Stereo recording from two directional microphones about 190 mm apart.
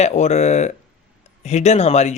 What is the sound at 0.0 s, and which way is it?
Speech, 35° left (ahead or behind).